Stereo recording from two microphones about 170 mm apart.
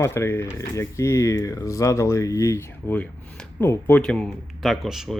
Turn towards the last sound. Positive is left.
turn(degrees=0)  # may be behind; listen again after turning